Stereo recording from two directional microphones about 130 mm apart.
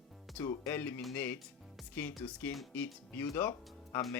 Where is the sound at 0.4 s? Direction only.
15° left (ahead or behind).